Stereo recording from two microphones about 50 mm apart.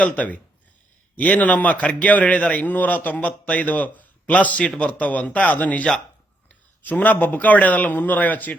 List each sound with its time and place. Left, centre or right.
1.1 s a man's voice: left
6.9 s a man's voice: left